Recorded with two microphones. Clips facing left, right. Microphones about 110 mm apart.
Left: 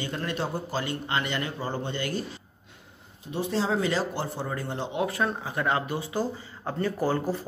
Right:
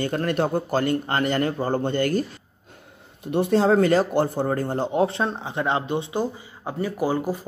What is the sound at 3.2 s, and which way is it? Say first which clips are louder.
A man's voice: right 9 dB; 60° right (ahead or behind).